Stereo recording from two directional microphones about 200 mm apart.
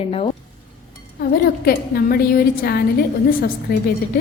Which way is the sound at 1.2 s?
50° left (ahead or behind).